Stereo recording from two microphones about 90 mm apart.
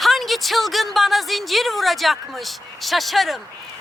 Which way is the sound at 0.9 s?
Centre (ahead or behind).